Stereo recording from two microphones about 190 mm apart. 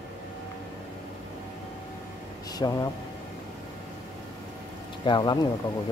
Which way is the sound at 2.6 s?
20° left (ahead or behind).